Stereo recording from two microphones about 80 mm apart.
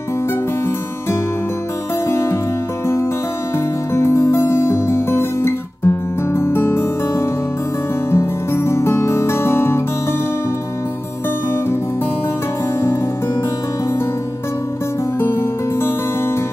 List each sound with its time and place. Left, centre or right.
2.0 s music: left
3.5 s music: left
15.1 s music: left